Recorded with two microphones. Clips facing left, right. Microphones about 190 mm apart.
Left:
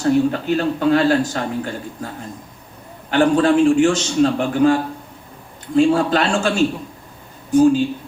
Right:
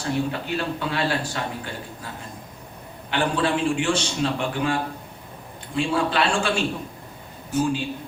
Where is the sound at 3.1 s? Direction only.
45° left (ahead or behind).